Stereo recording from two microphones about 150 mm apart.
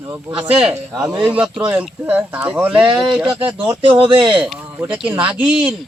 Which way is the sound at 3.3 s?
35° right (ahead or behind).